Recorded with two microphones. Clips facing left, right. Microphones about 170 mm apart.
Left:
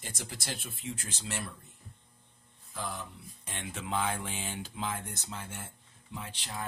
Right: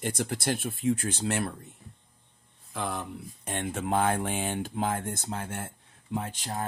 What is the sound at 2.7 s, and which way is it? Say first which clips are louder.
Speech: right 6 dB; 65° right (ahead or behind).